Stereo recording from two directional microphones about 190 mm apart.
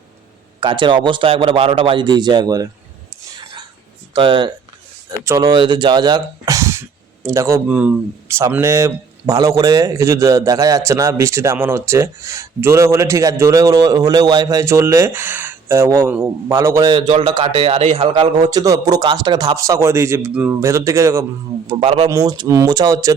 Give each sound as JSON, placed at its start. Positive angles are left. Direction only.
{"t": 0.6, "sound": "a man's voice", "side_deg": -25}
{"t": 4.1, "sound": "a man's voice", "side_deg": -25}
{"t": 21.7, "sound": "a man's voice", "side_deg": -25}